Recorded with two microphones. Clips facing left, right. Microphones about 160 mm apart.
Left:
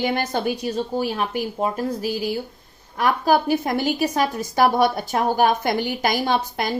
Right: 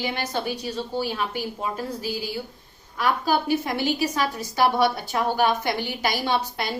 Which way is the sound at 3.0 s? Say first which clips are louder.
Left 4 dB; 50° left (ahead or behind).